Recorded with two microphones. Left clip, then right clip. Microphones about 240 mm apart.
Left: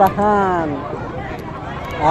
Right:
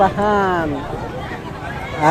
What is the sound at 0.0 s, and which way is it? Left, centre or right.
Speech, right.